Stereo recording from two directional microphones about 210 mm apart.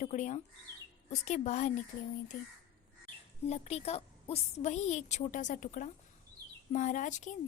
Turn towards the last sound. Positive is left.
turn(degrees=35)  # may be behind; listen again after turning